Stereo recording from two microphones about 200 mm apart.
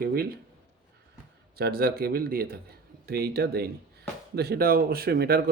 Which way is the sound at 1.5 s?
50° right (ahead or behind).